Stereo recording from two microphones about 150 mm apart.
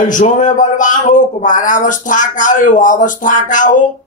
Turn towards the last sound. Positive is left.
turn(degrees=60)  # may be behind; listen again after turning